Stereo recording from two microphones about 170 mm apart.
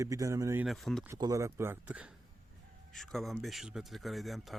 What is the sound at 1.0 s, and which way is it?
Speech, 20° right (ahead or behind).